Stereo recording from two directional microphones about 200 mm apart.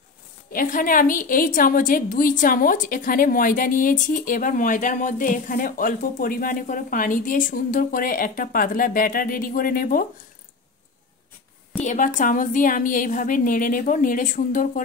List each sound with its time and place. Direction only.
0.5 s a woman's voice: 45° left (ahead or behind)
11.8 s a woman's voice: 40° left (ahead or behind)